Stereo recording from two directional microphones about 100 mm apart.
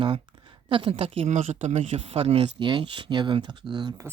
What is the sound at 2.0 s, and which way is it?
Speech, 90° right.